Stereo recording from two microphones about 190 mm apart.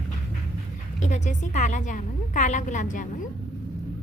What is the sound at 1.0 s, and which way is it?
A woman's voice, 40° left (ahead or behind).